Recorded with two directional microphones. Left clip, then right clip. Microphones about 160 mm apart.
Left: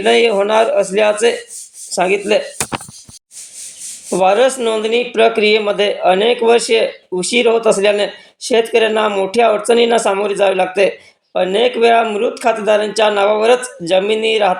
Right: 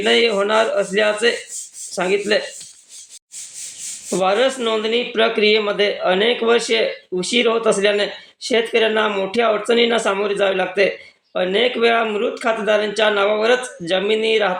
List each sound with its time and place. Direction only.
0.0 s speech: 30° left (ahead or behind)
4.1 s speech: 30° left (ahead or behind)